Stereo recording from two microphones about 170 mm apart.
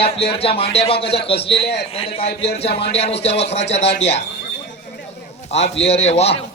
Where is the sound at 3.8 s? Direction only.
90° left.